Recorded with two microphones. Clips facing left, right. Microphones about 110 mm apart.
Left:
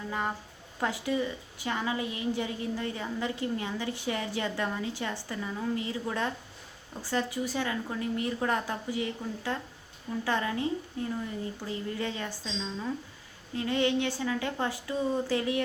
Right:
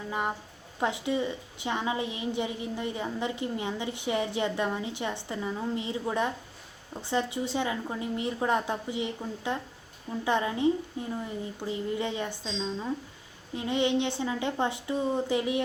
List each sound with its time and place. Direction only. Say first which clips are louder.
0.1 s a woman's voice: right 2 dB; 20° right (ahead or behind)